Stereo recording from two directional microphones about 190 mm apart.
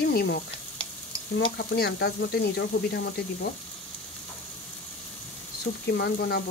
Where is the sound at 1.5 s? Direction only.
60° left (ahead or behind).